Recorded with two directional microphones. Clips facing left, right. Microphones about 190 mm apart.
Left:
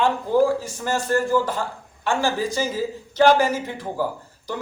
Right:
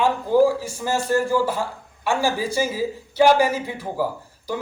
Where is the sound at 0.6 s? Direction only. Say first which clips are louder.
Right 1 dB; 10° right (ahead or behind).